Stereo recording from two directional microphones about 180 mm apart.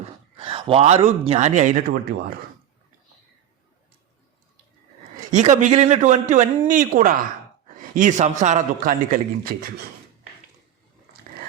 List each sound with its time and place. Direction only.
0.3 s a man's voice: 30° right (ahead or behind); by 2.1 s 50° right (ahead or behind)
5.3 s a man's voice: 40° right (ahead or behind)